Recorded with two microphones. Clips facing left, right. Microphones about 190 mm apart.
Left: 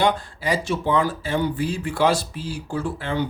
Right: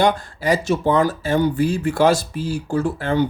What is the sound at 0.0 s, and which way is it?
Speech, 45° right (ahead or behind).